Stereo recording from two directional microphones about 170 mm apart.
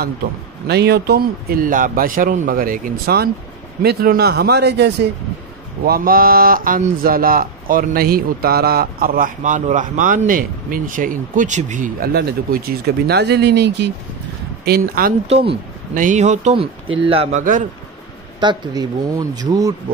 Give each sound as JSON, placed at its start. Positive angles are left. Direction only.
{"t": 0.7, "sound": "speech", "side_deg": -75}
{"t": 5.9, "sound": "speech", "side_deg": -60}
{"t": 14.6, "sound": "speech", "side_deg": -65}
{"t": 15.2, "sound": "speech", "side_deg": -35}
{"t": 15.9, "sound": "speech", "side_deg": -50}
{"t": 18.4, "sound": "speech", "side_deg": -25}